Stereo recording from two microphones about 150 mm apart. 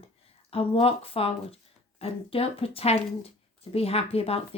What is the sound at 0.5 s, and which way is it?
Speech, 40° left (ahead or behind).